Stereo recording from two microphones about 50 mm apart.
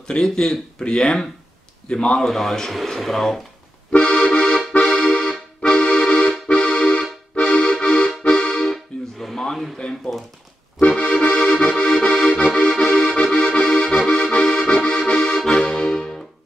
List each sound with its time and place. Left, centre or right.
0.1 s speech: centre
2.2 s speech: centre
3.9 s music: left
5.0 s accordion: centre
8.2 s music: centre
9.2 s a sound: centre
10.8 s accordion: left